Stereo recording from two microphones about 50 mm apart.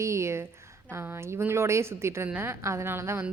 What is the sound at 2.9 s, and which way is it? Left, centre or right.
Speech, right.